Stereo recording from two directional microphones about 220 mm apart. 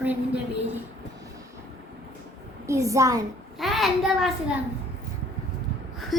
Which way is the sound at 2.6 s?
15° right (ahead or behind).